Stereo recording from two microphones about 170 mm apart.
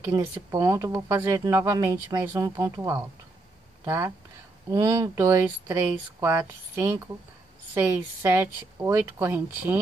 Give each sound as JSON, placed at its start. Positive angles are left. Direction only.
{"t": 0.1, "sound": "speech", "side_deg": -20}